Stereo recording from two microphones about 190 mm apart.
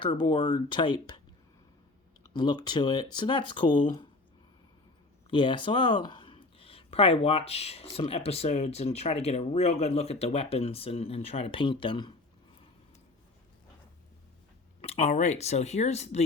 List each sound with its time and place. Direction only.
0.2 s speech: 25° left (ahead or behind)
2.3 s speech: 25° left (ahead or behind)
5.3 s speech: 25° left (ahead or behind)
14.8 s speech: 35° left (ahead or behind)